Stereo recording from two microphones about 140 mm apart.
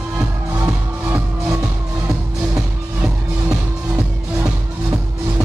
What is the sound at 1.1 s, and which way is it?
Music, 10° right (ahead or behind).